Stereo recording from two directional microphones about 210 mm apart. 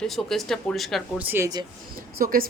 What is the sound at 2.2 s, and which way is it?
Speech, 45° right (ahead or behind).